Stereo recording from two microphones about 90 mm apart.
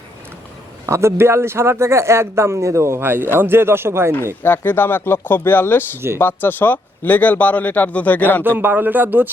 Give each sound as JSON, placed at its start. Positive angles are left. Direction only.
{"t": 0.9, "sound": "speech", "side_deg": -30}
{"t": 4.4, "sound": "speech", "side_deg": 25}
{"t": 8.4, "sound": "speech", "side_deg": -20}